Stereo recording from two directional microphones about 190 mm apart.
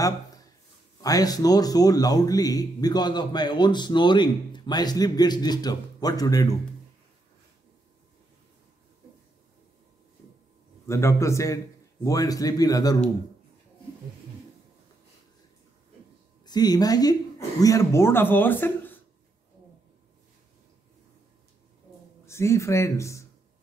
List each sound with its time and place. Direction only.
1.0 s a man's voice: 20° left (ahead or behind)
10.9 s a man's voice: 15° left (ahead or behind)
16.4 s a man's voice: 20° left (ahead or behind)
22.2 s a man's voice: 15° left (ahead or behind)